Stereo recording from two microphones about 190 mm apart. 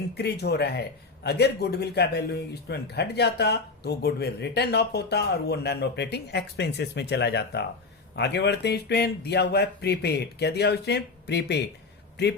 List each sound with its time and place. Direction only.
0.1 s a man's voice: 60° left (ahead or behind)